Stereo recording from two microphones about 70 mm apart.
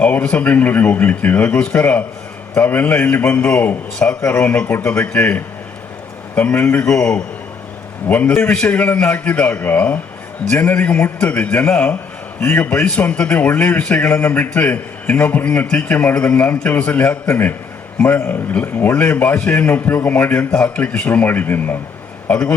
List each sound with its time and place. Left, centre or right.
0.0 s a man's voice: centre
6.8 s a man's voice: centre
8.0 s a man's voice: left
12.8 s a man's voice: centre
20.7 s a man's voice: left